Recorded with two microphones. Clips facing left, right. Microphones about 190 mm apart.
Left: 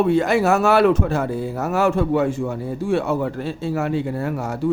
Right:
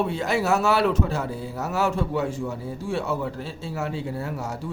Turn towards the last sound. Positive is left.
turn(degrees=55)  # may be behind; listen again after turning